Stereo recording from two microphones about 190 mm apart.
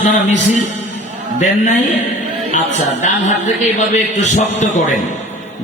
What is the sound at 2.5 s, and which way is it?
A man's voice, 40° left (ahead or behind).